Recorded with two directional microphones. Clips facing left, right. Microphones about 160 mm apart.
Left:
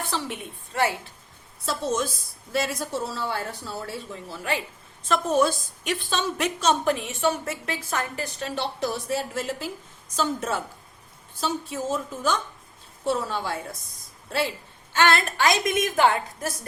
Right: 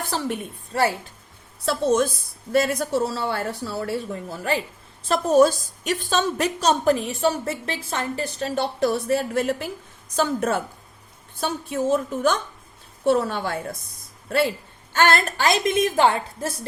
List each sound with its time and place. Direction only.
0.0 s a woman's voice: 40° right (ahead or behind)
2.5 s speech: 55° right (ahead or behind)
5.0 s a woman's voice: 35° right (ahead or behind); by 13.7 s 55° right (ahead or behind)
14.9 s a woman's voice: 45° right (ahead or behind)
15.4 s a woman's voice: 30° right (ahead or behind)